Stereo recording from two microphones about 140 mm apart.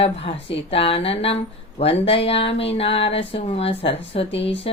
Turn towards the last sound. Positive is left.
turn(degrees=45)  # may be behind; listen again after turning